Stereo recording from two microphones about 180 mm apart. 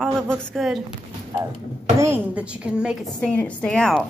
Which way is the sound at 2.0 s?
10° right (ahead or behind).